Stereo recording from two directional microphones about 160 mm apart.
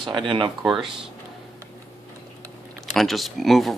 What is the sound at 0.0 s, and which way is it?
Speech, 30° right (ahead or behind).